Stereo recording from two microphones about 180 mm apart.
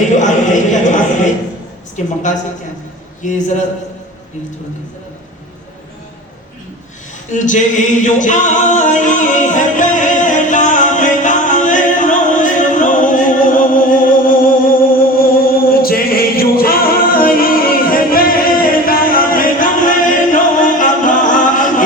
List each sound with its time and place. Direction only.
0.2 s a sound: 45° left (ahead or behind)
3.2 s a man's voice: 45° left (ahead or behind)
7.3 s a capella: 45° left (ahead or behind)